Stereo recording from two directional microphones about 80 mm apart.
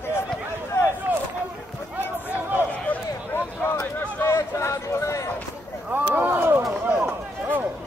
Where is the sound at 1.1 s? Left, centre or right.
Centre.